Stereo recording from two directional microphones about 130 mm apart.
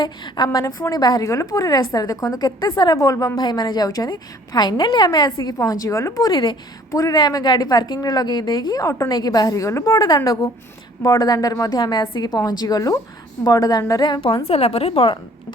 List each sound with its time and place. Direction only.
0.0 s a woman's voice: 30° left (ahead or behind)
14.4 s a woman's voice: 50° left (ahead or behind)